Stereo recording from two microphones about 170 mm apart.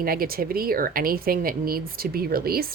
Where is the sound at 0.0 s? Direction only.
60° right (ahead or behind).